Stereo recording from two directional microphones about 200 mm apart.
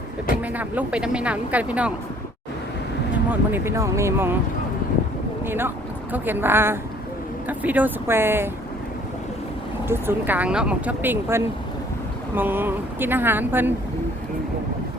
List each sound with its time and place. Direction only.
0.4 s speech: 10° right (ahead or behind)
3.2 s speech: 10° right (ahead or behind)
5.5 s speech: 10° right (ahead or behind)
9.9 s speech: 10° right (ahead or behind)